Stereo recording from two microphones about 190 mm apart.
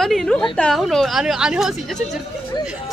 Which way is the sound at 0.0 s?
Centre (ahead or behind).